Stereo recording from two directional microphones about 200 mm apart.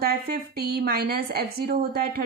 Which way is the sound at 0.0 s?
50° right (ahead or behind).